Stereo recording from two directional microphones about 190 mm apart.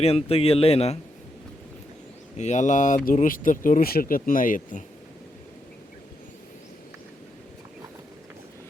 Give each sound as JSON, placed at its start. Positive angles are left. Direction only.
{"t": 0.0, "sound": "a man's voice", "side_deg": 30}
{"t": 2.4, "sound": "speech", "side_deg": 40}